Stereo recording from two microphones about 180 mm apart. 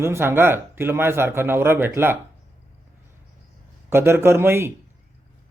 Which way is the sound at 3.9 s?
15° right (ahead or behind).